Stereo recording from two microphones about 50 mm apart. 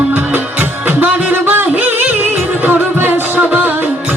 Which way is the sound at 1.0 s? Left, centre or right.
Right.